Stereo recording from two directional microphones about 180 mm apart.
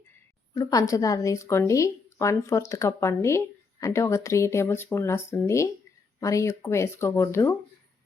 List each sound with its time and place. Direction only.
0.5 s speech: 20° left (ahead or behind)